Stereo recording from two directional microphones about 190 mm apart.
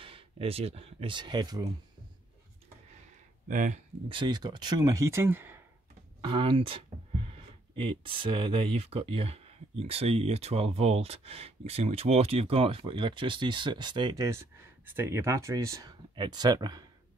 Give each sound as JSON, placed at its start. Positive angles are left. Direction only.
{"t": 0.0, "sound": "speech", "side_deg": -30}
{"t": 3.4, "sound": "speech", "side_deg": -40}
{"t": 4.1, "sound": "speech", "side_deg": -25}
{"t": 6.2, "sound": "speech", "side_deg": -25}